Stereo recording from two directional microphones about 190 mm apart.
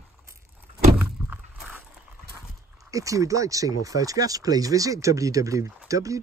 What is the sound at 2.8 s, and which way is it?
Speech, 15° right (ahead or behind).